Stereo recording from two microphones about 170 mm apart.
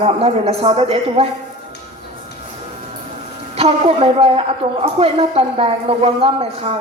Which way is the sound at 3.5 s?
35° right (ahead or behind).